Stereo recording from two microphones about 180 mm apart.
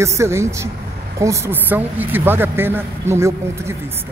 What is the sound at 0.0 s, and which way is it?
A man's voice, 15° right (ahead or behind).